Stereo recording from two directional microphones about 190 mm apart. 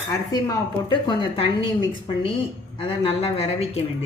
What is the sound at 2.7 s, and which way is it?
Speech, 30° left (ahead or behind).